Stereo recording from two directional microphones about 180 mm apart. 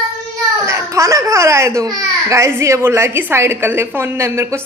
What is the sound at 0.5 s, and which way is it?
A child's voice, 15° right (ahead or behind).